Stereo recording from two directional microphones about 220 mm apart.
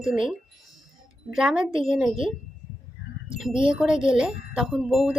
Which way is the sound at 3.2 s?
5° right (ahead or behind).